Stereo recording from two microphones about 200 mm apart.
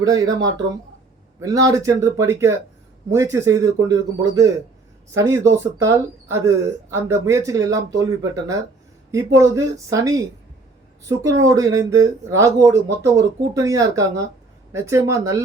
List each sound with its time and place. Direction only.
1.4 s speech: 15° right (ahead or behind)